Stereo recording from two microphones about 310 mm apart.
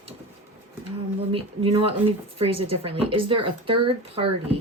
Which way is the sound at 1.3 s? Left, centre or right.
Centre.